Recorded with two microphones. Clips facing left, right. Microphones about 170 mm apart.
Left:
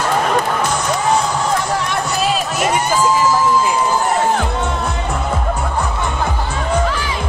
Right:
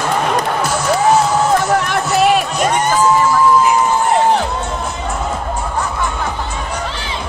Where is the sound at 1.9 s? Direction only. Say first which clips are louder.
Right 5 dB; 65° right (ahead or behind).